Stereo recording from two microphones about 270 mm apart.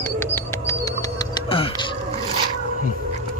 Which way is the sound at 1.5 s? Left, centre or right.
Centre.